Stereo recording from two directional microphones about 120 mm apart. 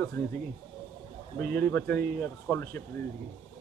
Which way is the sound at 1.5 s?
15° left (ahead or behind).